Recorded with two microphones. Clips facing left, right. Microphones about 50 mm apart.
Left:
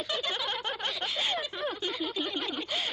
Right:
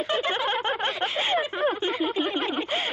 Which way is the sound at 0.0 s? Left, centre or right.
Right.